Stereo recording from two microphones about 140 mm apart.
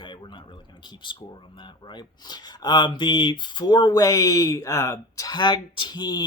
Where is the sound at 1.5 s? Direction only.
35° left (ahead or behind).